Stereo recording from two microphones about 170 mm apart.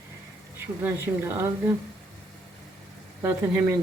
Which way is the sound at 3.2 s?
15° right (ahead or behind).